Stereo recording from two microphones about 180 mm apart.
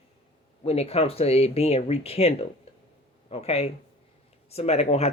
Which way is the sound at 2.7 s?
35° left (ahead or behind).